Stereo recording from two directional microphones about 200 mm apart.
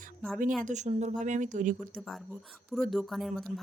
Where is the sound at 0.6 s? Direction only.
35° right (ahead or behind).